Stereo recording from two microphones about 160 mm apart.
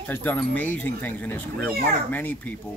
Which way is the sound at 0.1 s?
10° left (ahead or behind).